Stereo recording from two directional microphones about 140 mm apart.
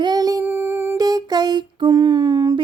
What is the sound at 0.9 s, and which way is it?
Speech, 25° right (ahead or behind).